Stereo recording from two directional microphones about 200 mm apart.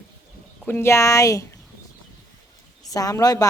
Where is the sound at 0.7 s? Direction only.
10° left (ahead or behind).